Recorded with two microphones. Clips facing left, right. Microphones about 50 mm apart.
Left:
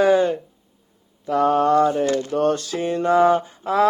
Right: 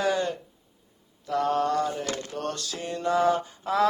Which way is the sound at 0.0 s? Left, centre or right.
Left.